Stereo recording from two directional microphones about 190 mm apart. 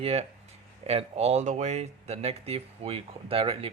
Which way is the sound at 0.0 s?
30° right (ahead or behind).